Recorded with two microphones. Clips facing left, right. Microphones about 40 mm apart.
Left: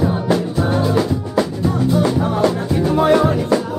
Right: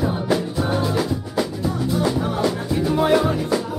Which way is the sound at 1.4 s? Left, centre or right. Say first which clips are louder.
Left 5 dB; left.